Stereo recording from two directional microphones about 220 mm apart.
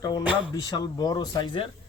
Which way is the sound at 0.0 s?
20° left (ahead or behind).